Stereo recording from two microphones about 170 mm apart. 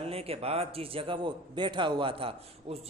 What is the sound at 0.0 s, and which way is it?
A man's voice, 35° right (ahead or behind).